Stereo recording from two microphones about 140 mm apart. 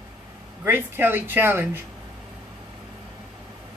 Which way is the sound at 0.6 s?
15° right (ahead or behind).